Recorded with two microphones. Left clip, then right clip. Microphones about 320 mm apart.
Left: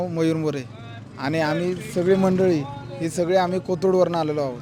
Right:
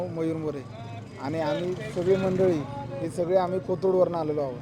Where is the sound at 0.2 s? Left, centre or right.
Left.